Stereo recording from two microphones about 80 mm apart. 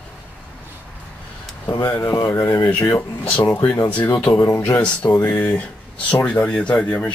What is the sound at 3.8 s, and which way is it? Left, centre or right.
Speech, left.